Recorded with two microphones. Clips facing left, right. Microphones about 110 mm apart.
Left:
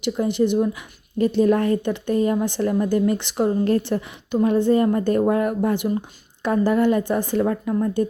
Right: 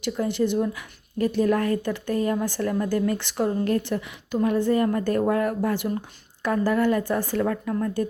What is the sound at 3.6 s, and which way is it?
Speech, 30° left (ahead or behind).